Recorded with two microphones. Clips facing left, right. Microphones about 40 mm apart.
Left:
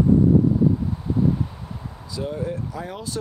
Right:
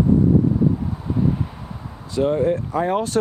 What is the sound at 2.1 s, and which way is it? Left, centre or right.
Speech, right.